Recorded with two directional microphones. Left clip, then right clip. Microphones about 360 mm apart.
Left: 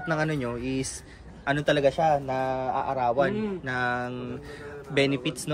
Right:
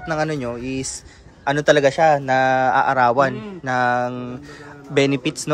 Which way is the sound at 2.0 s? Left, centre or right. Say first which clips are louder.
Right 8 dB; right.